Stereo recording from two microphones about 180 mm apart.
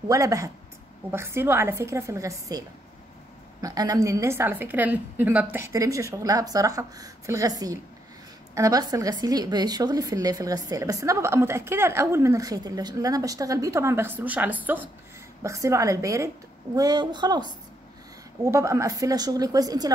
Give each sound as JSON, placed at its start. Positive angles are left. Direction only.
{"t": 0.1, "sound": "a woman's voice", "side_deg": -15}
{"t": 3.6, "sound": "a woman's voice", "side_deg": -20}